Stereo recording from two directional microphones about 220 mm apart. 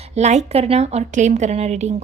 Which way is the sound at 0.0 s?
30° right (ahead or behind).